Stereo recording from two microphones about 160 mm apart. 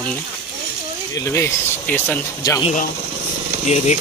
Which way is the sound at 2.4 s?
25° left (ahead or behind).